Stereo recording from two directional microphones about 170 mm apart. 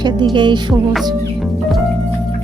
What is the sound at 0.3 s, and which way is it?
Music, 30° right (ahead or behind).